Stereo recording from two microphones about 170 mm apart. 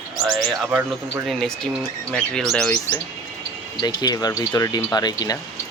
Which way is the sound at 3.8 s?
25° left (ahead or behind).